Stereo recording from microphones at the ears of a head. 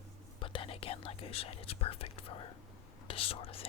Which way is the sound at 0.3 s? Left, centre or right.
Left.